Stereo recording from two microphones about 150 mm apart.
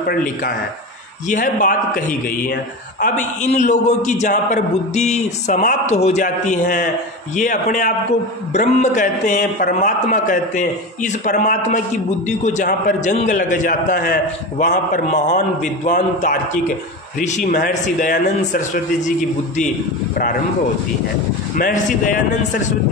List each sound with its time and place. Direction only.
0.0 s a man's voice: 65° left (ahead or behind)
3.0 s a man's voice: 50° left (ahead or behind); by 14.1 s 70° left (ahead or behind)
14.6 s a man's voice: 60° left (ahead or behind)
21.5 s a man's voice: 65° left (ahead or behind)